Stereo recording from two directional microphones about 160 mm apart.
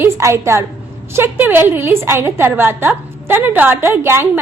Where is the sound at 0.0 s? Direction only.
15° right (ahead or behind).